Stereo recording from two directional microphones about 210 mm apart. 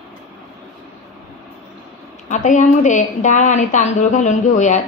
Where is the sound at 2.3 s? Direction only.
35° left (ahead or behind).